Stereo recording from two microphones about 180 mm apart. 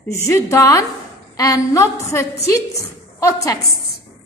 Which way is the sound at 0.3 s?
15° left (ahead or behind).